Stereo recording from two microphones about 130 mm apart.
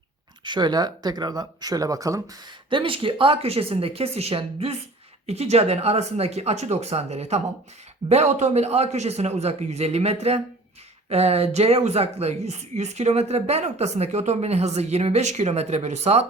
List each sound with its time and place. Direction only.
0.4 s speech: 35° right (ahead or behind)
2.6 s a woman's voice: 40° right (ahead or behind); by 16.2 s 55° right (ahead or behind)